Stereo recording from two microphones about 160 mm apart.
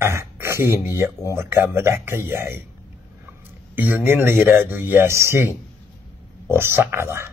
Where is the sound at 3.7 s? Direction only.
10° right (ahead or behind).